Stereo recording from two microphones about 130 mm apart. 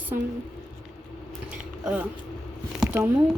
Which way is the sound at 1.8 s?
10° right (ahead or behind).